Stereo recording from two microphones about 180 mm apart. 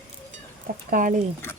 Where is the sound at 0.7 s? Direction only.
50° right (ahead or behind).